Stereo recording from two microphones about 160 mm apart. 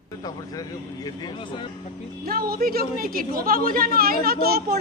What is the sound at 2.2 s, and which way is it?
A woman's voice, 70° right (ahead or behind).